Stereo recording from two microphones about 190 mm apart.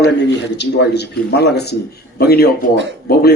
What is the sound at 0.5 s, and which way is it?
Speech, 65° left (ahead or behind).